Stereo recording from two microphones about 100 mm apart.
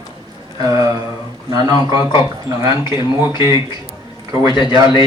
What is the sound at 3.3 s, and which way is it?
Speech, 30° right (ahead or behind).